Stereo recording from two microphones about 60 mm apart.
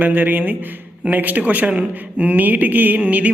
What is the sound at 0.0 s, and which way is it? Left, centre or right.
A man's voice, right.